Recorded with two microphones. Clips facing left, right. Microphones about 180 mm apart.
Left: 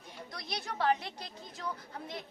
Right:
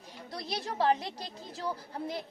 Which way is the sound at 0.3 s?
30° right (ahead or behind).